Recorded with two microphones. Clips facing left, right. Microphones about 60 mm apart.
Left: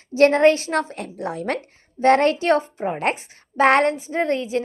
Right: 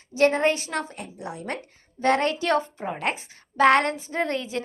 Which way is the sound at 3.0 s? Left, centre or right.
Left.